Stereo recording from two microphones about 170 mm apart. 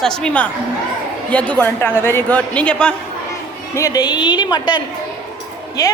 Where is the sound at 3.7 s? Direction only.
20° left (ahead or behind).